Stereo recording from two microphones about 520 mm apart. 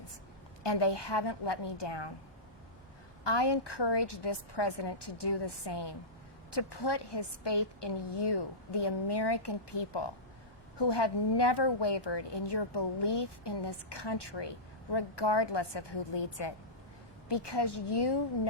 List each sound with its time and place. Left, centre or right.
0.6 s a woman's voice: left
3.2 s a woman's voice: left